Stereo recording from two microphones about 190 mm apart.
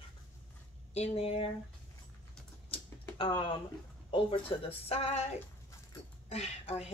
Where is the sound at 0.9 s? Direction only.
30° left (ahead or behind).